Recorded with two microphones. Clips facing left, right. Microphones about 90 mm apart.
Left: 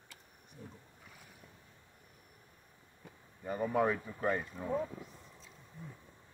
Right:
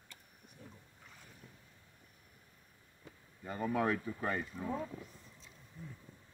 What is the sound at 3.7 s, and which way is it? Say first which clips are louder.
Speech: left 2 dB; 15° left (ahead or behind).